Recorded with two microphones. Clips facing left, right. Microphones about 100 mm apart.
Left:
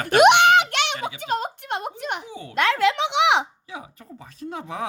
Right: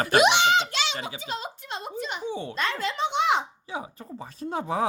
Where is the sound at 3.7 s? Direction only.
30° right (ahead or behind).